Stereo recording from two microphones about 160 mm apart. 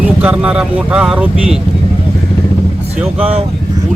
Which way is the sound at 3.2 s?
40° right (ahead or behind).